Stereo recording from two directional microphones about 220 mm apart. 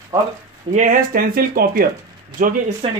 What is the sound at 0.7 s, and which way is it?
Speech, 35° right (ahead or behind).